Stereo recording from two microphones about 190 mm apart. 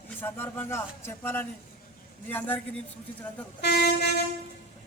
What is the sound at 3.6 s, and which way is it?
Speech, 60° left (ahead or behind).